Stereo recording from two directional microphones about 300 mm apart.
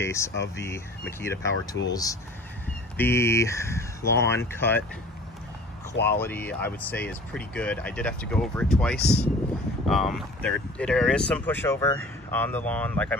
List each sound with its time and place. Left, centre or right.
0.0 s speech: centre
1.8 s speech: left
3.0 s speech: centre
6.1 s speech: centre
9.0 s speech: left
9.8 s speech: centre